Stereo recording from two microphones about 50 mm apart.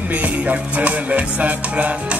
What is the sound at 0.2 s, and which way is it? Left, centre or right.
Music, right.